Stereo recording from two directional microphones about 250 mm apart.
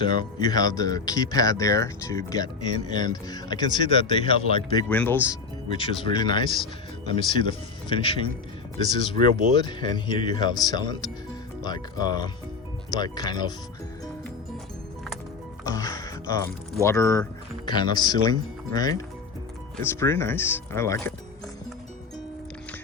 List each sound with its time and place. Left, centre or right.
0.0 s speech: centre
4.9 s speech: centre
5.6 s speech: left
15.6 s speech: centre